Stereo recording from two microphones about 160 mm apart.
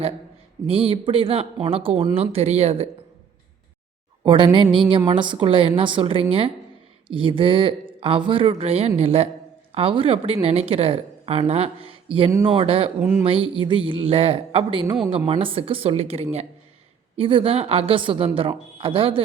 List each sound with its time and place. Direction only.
0.7 s speech: 35° right (ahead or behind)
4.2 s speech: 30° right (ahead or behind)
13.0 s speech: 15° right (ahead or behind)
13.2 s speech: 35° right (ahead or behind)